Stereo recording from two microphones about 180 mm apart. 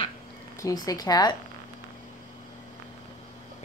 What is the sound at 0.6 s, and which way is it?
Speech, 20° left (ahead or behind).